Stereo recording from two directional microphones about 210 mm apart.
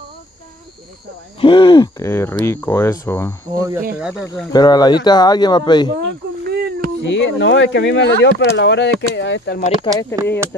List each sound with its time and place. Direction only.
1.4 s speech: 25° left (ahead or behind)
2.0 s speech: 10° left (ahead or behind)
3.5 s speech: 15° right (ahead or behind)
3.9 s speech: 5° right (ahead or behind)
4.5 s speech: 20° left (ahead or behind)
5.9 s a sound: 55° right (ahead or behind)
7.0 s speech: 60° left (ahead or behind)
9.9 s speech: 15° left (ahead or behind)